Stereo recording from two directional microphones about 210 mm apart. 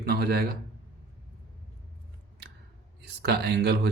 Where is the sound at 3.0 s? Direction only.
50° right (ahead or behind).